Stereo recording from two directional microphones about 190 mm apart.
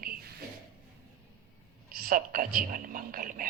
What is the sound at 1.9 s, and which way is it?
Speech, 50° right (ahead or behind).